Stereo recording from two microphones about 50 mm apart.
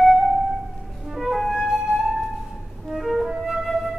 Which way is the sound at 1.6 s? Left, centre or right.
Centre.